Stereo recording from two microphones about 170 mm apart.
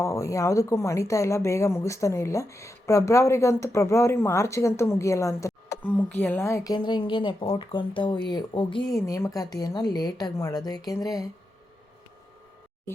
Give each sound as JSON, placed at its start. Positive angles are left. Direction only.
{"t": 0.0, "sound": "a woman's voice", "side_deg": 15}